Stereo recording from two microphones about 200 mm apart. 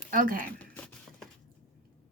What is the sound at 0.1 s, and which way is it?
Speech, 45° right (ahead or behind).